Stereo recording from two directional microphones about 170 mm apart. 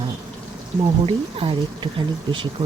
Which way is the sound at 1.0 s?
30° right (ahead or behind).